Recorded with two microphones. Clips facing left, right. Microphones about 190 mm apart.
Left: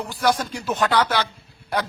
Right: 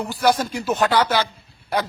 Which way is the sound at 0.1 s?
5° right (ahead or behind).